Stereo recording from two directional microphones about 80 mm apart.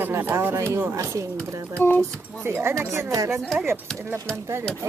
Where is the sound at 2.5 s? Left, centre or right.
Right.